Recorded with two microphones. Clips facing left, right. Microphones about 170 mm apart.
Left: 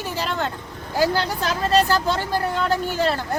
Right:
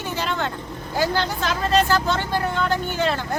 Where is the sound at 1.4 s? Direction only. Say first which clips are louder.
Left 1 dB; 35° left (ahead or behind).